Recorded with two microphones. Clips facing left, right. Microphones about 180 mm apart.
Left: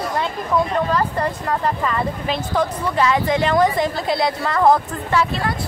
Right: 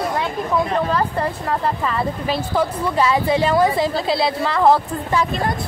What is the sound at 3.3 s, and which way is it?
A woman's voice, 10° right (ahead or behind).